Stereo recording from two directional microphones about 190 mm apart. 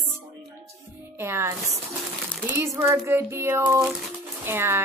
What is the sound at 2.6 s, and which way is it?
A woman's voice, 10° right (ahead or behind).